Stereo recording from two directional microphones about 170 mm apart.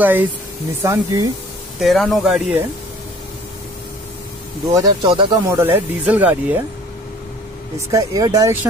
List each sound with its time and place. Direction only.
0.0 s speech: 10° right (ahead or behind)
1.8 s speech: centre (ahead or behind)
4.7 s speech: 25° right (ahead or behind)
5.5 s speech: 15° right (ahead or behind)
7.9 s speech: 20° right (ahead or behind)